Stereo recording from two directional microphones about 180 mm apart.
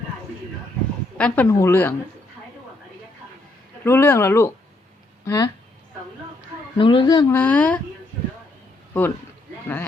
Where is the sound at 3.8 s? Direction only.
10° left (ahead or behind).